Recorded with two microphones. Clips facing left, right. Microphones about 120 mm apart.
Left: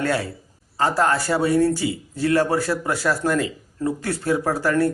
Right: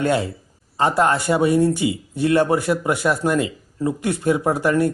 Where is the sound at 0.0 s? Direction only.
20° right (ahead or behind).